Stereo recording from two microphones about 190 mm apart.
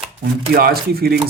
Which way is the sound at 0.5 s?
55° right (ahead or behind).